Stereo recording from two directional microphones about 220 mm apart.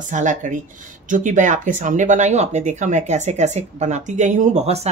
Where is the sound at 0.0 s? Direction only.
35° right (ahead or behind).